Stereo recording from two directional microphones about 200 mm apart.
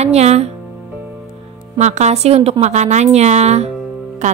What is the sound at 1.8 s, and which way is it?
A woman's voice, 35° right (ahead or behind).